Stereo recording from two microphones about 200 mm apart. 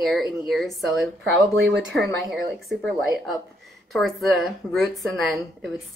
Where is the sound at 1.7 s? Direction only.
60° right (ahead or behind).